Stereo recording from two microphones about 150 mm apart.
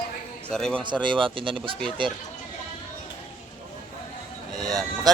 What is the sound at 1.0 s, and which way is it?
Speech, 35° right (ahead or behind).